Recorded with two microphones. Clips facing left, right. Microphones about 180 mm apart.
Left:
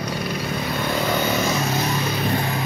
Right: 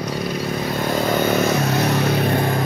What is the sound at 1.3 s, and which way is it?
Vehicle, 60° right (ahead or behind).